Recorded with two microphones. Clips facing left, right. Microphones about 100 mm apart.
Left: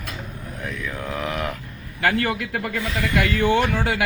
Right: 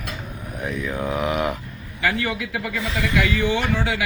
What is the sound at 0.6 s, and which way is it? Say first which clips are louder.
Mantra: right 5 dB; 20° right (ahead or behind).